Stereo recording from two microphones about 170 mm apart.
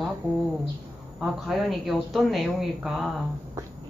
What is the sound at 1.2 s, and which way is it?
Speech, centre (ahead or behind).